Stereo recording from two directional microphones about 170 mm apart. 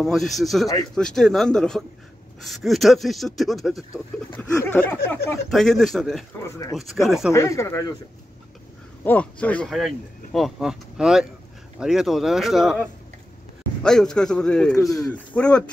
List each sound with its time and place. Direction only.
0.0 s speech: centre (ahead or behind)
4.4 s speech: 10° left (ahead or behind)
6.4 s speech: 15° left (ahead or behind)
6.7 s speech: centre (ahead or behind)
7.3 s speech: 15° left (ahead or behind)
9.0 s speech: 10° left (ahead or behind)
13.8 s speech: 5° left (ahead or behind)